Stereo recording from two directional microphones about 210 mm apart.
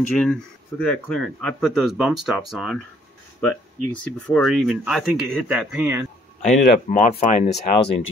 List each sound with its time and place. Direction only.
0.2 s speech: 5° left (ahead or behind)
4.3 s speech: centre (ahead or behind)
6.4 s speech: 35° left (ahead or behind)